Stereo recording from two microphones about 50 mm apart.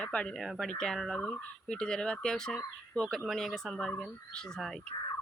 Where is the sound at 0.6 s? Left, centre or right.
Centre.